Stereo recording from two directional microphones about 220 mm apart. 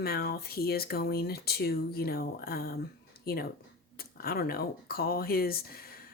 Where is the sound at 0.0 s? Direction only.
45° left (ahead or behind).